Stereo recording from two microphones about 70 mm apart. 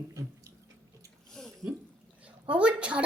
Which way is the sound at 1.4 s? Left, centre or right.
Centre.